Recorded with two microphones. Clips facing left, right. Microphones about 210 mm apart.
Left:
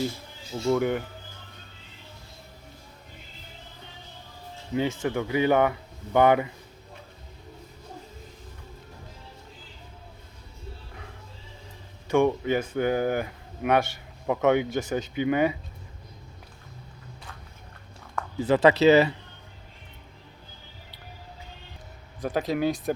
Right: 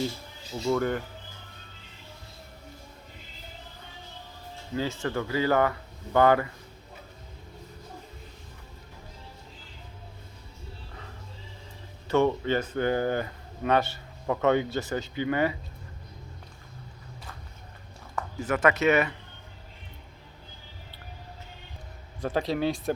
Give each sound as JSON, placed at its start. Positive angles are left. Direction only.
{"t": 0.7, "sound": "speech", "side_deg": 10}
{"t": 4.7, "sound": "speech", "side_deg": 15}
{"t": 12.0, "sound": "speech", "side_deg": 15}
{"t": 18.3, "sound": "speech", "side_deg": 25}
{"t": 22.2, "sound": "speech", "side_deg": 0}